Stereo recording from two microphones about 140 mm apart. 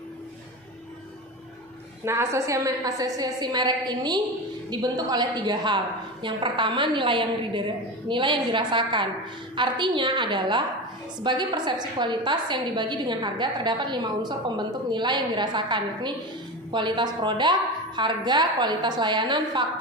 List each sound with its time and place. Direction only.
2.0 s a woman's voice: 20° right (ahead or behind)